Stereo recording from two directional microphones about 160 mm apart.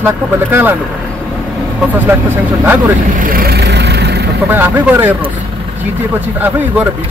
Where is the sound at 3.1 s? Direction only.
60° right (ahead or behind); by 4.3 s 90° right.